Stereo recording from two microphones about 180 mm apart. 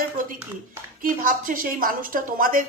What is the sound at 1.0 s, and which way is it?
A woman's voice, 50° right (ahead or behind).